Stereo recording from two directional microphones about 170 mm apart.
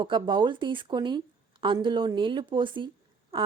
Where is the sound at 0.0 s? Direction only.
30° right (ahead or behind).